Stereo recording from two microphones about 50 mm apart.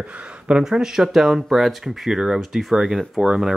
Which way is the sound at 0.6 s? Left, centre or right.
Centre.